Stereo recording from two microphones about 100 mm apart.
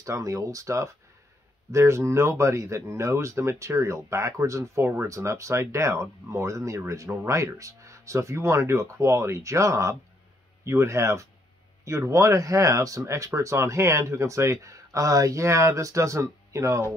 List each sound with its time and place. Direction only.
0.0 s speech: 35° right (ahead or behind)